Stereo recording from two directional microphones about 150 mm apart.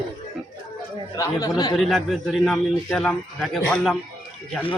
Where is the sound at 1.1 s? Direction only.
20° left (ahead or behind).